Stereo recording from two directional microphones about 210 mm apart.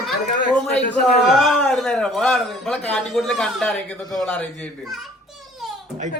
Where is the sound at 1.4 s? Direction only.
Centre (ahead or behind).